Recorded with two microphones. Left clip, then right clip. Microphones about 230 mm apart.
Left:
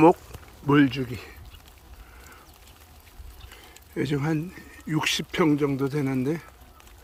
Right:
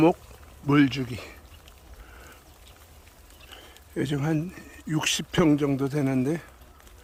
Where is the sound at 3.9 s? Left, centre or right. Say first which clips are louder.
Left 1 dB; centre.